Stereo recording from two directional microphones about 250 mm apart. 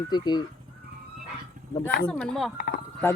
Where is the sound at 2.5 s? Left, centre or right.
Left.